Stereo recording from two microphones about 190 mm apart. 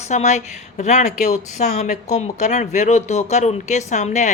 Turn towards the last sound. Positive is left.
turn(degrees=40)  # may be behind; listen again after turning